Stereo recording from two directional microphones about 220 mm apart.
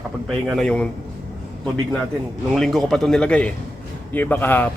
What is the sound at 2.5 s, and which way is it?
Speech, centre (ahead or behind).